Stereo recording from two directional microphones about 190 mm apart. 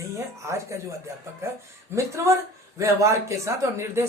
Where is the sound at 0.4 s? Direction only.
15° right (ahead or behind).